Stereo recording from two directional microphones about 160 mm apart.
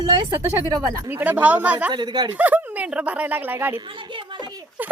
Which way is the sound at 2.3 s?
10° right (ahead or behind).